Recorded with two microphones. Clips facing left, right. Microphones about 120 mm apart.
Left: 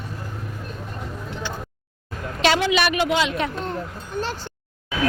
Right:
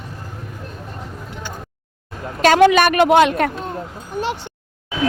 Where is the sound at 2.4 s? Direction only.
50° right (ahead or behind).